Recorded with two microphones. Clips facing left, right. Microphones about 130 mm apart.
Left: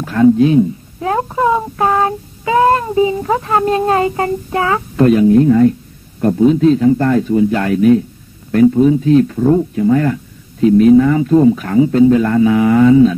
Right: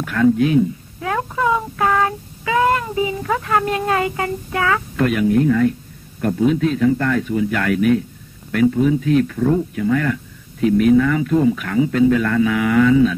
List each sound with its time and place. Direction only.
0.0 s child singing: 30° left (ahead or behind)